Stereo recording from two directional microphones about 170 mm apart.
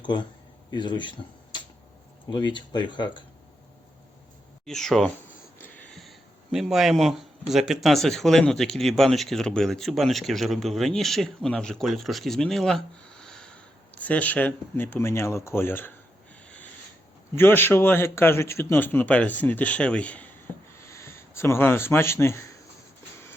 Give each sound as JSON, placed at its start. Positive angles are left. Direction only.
{"t": 0.0, "sound": "speech", "side_deg": 25}
{"t": 2.3, "sound": "speech", "side_deg": 25}
{"t": 4.6, "sound": "speech", "side_deg": 0}
{"t": 17.3, "sound": "speech", "side_deg": 10}